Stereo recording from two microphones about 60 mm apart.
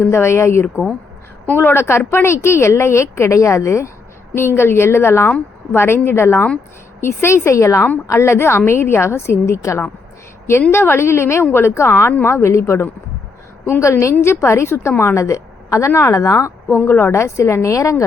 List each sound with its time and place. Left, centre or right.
0.0 s a woman's voice: left
4.4 s a woman's voice: left
16.7 s speech: left
17.1 s a woman's voice: left